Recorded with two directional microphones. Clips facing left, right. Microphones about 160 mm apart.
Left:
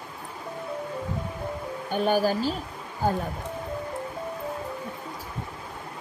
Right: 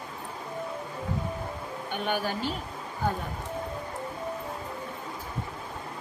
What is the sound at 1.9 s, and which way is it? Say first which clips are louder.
Speech: left 7 dB; 40° left (ahead or behind).